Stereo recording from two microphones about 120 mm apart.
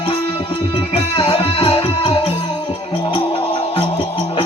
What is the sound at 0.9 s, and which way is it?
Music, 50° left (ahead or behind).